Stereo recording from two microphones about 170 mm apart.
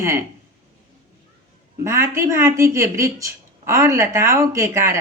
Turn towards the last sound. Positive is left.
turn(degrees=-15)  # may be behind; listen again after turning